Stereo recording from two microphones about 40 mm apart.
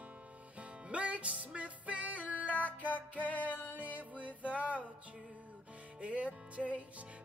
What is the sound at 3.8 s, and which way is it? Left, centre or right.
Music, right.